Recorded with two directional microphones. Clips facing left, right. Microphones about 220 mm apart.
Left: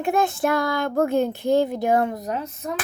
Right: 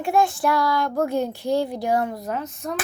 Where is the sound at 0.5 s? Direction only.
50° left (ahead or behind).